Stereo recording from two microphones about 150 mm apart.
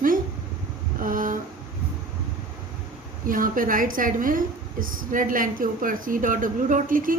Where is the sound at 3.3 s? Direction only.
65° right (ahead or behind).